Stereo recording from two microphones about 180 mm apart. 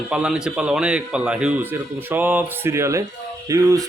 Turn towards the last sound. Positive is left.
turn(degrees=-20)  # may be behind; listen again after turning